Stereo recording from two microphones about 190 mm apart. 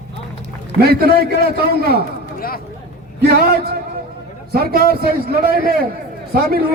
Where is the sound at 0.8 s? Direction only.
55° right (ahead or behind).